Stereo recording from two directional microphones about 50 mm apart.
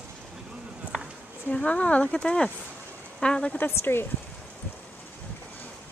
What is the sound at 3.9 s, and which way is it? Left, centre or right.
Speech, left.